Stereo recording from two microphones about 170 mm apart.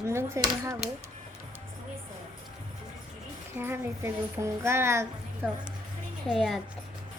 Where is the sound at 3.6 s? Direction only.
15° right (ahead or behind).